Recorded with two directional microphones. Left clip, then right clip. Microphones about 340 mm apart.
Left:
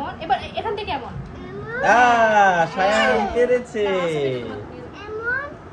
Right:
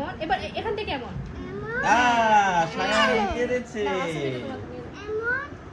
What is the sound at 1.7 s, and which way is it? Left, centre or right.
Cat, centre.